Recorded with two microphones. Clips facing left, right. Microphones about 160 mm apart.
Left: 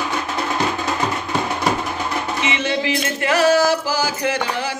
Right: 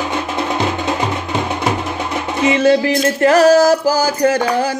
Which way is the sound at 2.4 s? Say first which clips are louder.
Right 12 dB; 40° right (ahead or behind).